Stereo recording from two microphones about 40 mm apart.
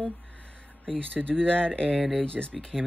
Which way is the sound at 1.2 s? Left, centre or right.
Left.